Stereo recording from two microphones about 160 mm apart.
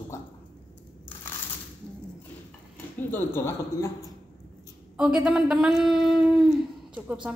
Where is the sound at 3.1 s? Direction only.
15° left (ahead or behind).